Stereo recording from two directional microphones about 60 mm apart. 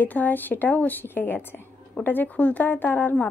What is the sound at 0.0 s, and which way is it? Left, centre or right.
A woman's voice, left.